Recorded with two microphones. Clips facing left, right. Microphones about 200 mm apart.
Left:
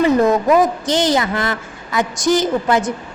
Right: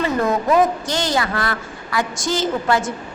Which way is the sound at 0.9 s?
20° left (ahead or behind).